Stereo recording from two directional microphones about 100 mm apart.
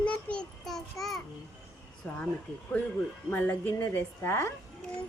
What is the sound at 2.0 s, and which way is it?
Speech, 15° left (ahead or behind).